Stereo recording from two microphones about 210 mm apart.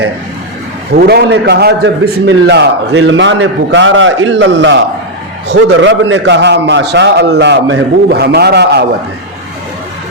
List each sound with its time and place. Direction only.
0.9 s a man's voice: 50° right (ahead or behind)